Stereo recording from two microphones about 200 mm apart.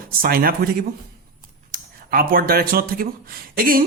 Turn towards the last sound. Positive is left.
turn(degrees=-45)  # may be behind; listen again after turning